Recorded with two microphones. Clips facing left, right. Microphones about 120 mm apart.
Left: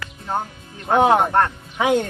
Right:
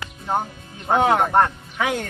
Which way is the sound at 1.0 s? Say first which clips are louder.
Left 2 dB; 20° left (ahead or behind).